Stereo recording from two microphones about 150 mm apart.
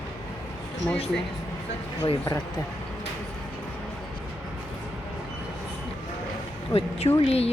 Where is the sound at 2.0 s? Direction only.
25° left (ahead or behind).